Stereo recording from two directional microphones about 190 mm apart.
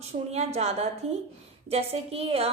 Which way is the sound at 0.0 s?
35° right (ahead or behind).